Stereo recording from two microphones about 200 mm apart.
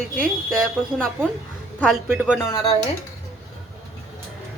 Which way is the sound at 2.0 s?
10° right (ahead or behind).